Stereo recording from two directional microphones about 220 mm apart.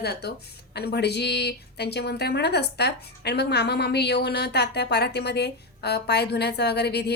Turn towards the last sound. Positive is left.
turn(degrees=50)  # may be behind; listen again after turning